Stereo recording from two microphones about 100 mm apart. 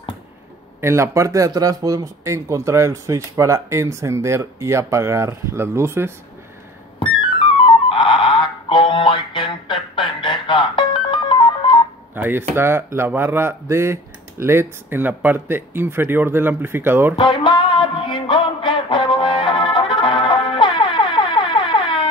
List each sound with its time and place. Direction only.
0.7 s speech: 25° right (ahead or behind)
7.0 s music: 60° left (ahead or behind)
12.2 s speech: 20° right (ahead or behind)
17.1 s music: 55° left (ahead or behind)